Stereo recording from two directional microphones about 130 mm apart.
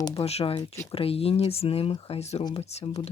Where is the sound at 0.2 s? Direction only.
50° left (ahead or behind).